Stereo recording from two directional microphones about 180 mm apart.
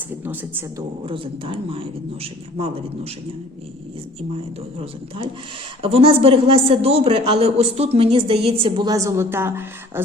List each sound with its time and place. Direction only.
1.0 s a woman's voice: 30° right (ahead or behind)
4.4 s a woman's voice: 30° right (ahead or behind); by 10.0 s 15° right (ahead or behind)